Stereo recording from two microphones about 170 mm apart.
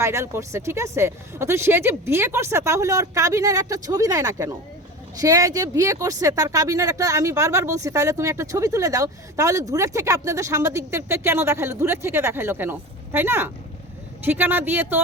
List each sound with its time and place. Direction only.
0.0 s speech: 15° right (ahead or behind)